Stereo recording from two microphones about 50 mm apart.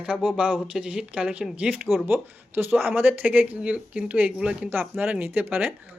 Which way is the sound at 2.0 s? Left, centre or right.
Right.